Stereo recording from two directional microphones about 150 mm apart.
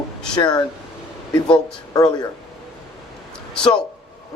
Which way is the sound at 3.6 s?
5° left (ahead or behind).